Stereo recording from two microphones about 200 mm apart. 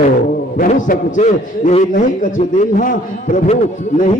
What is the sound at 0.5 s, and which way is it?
A man's voice, 40° left (ahead or behind).